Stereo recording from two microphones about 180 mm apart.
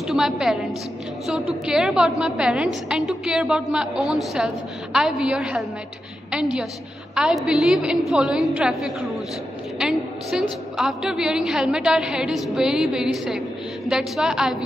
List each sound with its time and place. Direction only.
0.0 s a woman's voice: centre (ahead or behind)
7.2 s a woman's voice: 5° right (ahead or behind)